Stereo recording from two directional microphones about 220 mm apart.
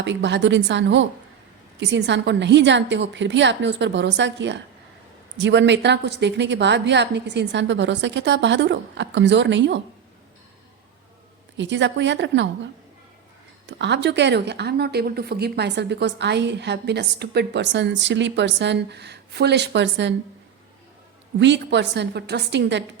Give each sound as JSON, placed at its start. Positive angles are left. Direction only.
{"t": 0.0, "sound": "a woman's voice", "side_deg": -55}
{"t": 11.5, "sound": "a woman's voice", "side_deg": -55}
{"t": 13.7, "sound": "a woman's voice", "side_deg": -55}
{"t": 21.3, "sound": "a woman's voice", "side_deg": -55}